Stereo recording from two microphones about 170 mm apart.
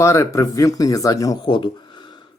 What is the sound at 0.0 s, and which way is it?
Speech, 15° left (ahead or behind).